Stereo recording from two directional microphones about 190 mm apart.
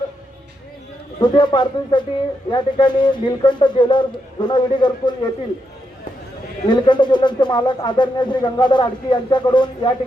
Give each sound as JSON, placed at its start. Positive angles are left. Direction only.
{"t": 1.2, "sound": "speech", "side_deg": 25}
{"t": 6.7, "sound": "speech", "side_deg": 25}